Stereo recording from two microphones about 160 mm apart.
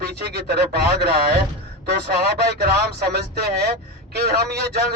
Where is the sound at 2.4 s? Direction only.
90° right.